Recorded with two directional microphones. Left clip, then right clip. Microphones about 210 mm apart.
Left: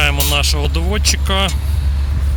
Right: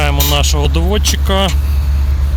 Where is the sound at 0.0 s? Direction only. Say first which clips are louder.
Right 1 dB; 10° right (ahead or behind).